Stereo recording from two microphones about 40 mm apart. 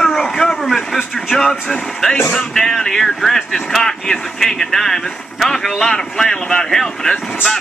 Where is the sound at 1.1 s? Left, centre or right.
Centre.